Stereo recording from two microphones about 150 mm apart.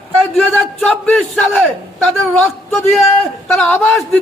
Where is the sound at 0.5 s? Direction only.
10° left (ahead or behind).